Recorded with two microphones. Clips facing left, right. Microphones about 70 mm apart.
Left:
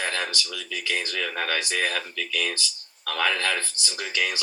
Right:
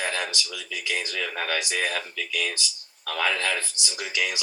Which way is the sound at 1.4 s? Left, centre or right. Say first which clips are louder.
Even; centre.